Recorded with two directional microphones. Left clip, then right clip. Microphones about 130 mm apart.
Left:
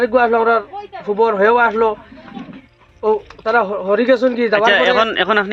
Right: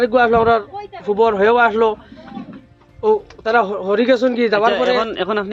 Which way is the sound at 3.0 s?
50° right (ahead or behind).